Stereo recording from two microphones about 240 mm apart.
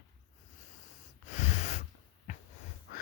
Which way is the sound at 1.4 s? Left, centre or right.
Left.